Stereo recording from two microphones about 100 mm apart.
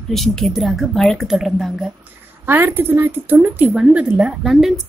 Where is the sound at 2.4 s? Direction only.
20° right (ahead or behind); by 4.7 s 5° right (ahead or behind).